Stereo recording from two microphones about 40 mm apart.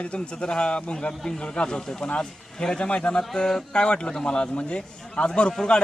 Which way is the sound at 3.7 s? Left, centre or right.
Left.